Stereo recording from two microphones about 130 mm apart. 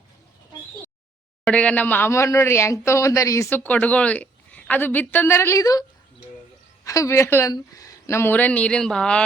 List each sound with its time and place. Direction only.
1.5 s speech: 10° left (ahead or behind); by 5.8 s 25° left (ahead or behind)
6.8 s speech: 25° left (ahead or behind); by 9.2 s 5° left (ahead or behind)